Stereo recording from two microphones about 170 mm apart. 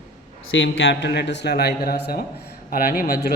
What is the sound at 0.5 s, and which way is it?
A man's voice, 90° left.